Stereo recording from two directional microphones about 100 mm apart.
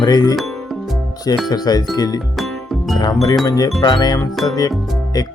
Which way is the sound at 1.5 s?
40° left (ahead or behind).